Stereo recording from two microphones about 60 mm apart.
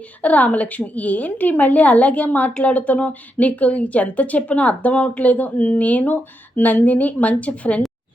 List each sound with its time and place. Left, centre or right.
0.2 s speech: left